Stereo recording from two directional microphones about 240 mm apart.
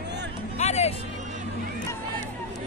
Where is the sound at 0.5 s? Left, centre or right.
Left.